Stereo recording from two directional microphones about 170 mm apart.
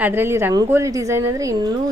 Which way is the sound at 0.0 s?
10° right (ahead or behind).